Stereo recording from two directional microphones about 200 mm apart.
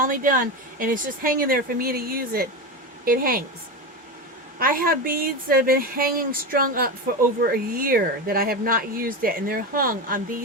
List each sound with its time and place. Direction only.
0.0 s a woman's voice: 45° right (ahead or behind)
4.6 s speech: 45° right (ahead or behind)